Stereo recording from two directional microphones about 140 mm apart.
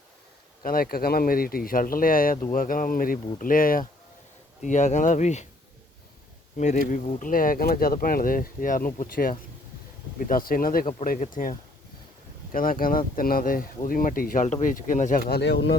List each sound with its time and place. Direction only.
0.6 s speech: 90° left
4.6 s speech: 60° left (ahead or behind)
6.6 s speech: 65° left (ahead or behind)
12.5 s speech: 85° left
14.4 s speech: 65° left (ahead or behind)